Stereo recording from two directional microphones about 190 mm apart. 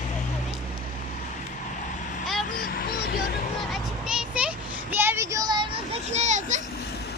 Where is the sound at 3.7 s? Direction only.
5° right (ahead or behind); by 5.8 s 25° right (ahead or behind).